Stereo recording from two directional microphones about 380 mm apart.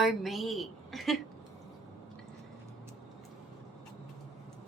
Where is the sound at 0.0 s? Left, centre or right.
Centre.